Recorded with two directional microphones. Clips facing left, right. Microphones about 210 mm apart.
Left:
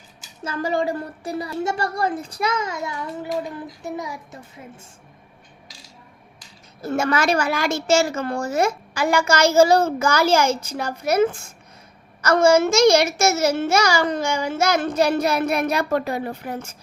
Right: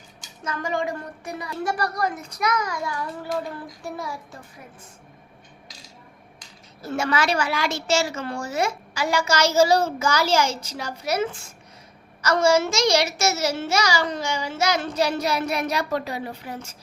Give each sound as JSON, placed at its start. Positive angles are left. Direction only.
{"t": 0.4, "sound": "speech", "side_deg": 30}
{"t": 6.8, "sound": "a woman's voice", "side_deg": 50}